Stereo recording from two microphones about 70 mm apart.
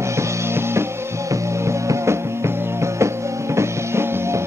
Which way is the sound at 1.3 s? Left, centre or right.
Right.